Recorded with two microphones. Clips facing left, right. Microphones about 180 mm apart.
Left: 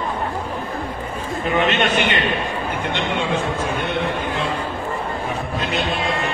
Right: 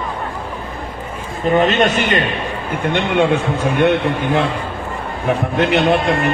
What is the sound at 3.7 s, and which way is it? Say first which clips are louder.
Speech: right 7 dB; 70° right (ahead or behind).